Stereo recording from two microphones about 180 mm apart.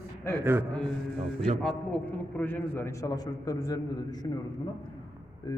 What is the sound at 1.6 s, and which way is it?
A man's voice, 5° left (ahead or behind).